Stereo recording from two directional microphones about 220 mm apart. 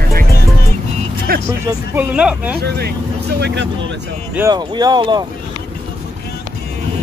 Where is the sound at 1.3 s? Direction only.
45° right (ahead or behind).